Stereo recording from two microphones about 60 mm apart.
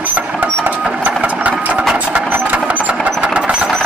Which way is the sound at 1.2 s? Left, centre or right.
Right.